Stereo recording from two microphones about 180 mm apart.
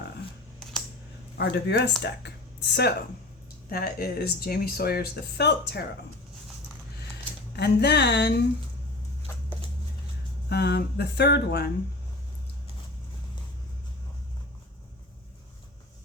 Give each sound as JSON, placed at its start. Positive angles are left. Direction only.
{"t": 1.4, "sound": "speech", "side_deg": 75}
{"t": 3.7, "sound": "speech", "side_deg": 55}
{"t": 7.5, "sound": "speech", "side_deg": 65}
{"t": 10.5, "sound": "speech", "side_deg": 65}